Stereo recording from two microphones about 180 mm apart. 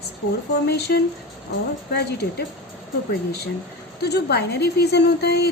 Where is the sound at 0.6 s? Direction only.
65° left (ahead or behind).